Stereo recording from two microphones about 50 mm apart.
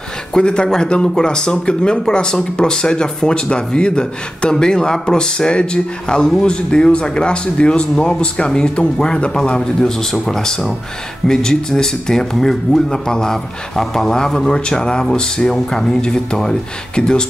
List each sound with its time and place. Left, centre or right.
0.3 s speech: centre